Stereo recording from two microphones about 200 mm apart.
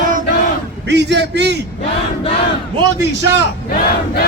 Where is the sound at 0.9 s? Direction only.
60° right (ahead or behind).